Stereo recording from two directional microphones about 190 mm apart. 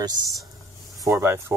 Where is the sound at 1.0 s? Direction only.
15° right (ahead or behind).